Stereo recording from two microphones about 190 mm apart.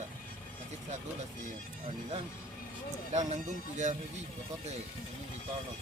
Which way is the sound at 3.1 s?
35° right (ahead or behind).